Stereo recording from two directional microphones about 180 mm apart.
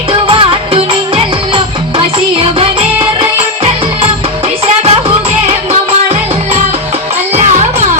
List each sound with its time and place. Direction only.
0.1 s music: 30° right (ahead or behind)
7.3 s music: 40° right (ahead or behind)